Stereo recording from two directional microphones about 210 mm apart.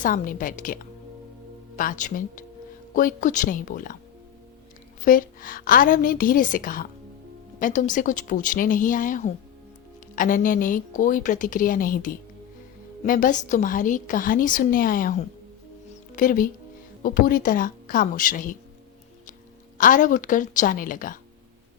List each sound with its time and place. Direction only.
0.0 s a woman's voice: 40° left (ahead or behind)
5.0 s a woman's voice: 40° left (ahead or behind)
19.8 s a woman's voice: 40° left (ahead or behind)